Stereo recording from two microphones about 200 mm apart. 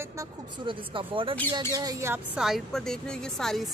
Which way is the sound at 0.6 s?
25° right (ahead or behind).